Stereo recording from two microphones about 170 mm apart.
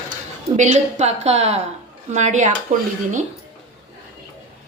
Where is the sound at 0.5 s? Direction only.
40° right (ahead or behind).